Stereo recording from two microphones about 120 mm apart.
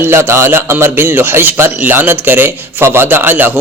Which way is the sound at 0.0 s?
20° right (ahead or behind).